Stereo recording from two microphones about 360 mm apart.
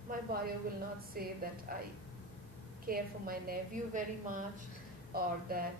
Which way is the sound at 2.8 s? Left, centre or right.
Right.